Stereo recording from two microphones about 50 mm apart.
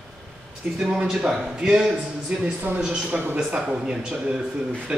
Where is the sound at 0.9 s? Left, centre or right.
Centre.